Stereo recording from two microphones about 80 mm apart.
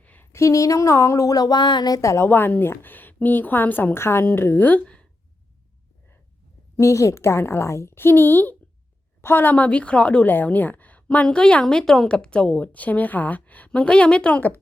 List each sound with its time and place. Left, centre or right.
0.0 s a sound: left
0.3 s speech: left
2.0 s a woman's voice: left
2.2 s a woman's voice: left
6.7 s a woman's voice: left; by 14.4 s centre